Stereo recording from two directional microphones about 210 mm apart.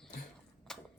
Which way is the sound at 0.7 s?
Centre (ahead or behind).